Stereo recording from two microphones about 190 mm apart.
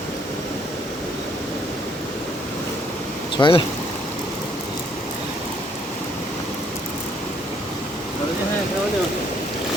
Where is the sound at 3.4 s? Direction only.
25° left (ahead or behind).